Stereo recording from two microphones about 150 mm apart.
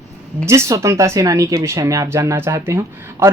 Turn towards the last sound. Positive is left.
turn(degrees=-20)  # may be behind; listen again after turning